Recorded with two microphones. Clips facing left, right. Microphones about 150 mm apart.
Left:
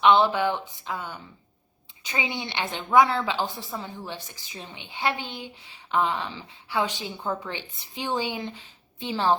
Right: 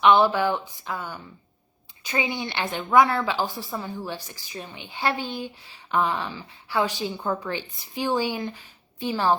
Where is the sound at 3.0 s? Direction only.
50° right (ahead or behind).